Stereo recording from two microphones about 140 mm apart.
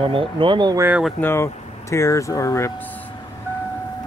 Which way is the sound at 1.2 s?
15° left (ahead or behind).